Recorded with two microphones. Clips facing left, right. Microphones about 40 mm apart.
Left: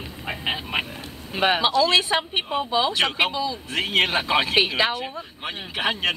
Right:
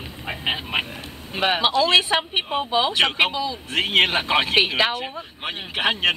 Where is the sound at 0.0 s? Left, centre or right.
Centre.